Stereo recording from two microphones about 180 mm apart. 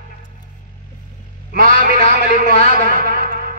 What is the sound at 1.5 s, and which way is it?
Speech, 50° right (ahead or behind).